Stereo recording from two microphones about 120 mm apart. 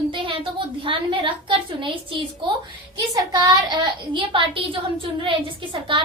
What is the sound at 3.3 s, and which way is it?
A woman's voice, 35° right (ahead or behind).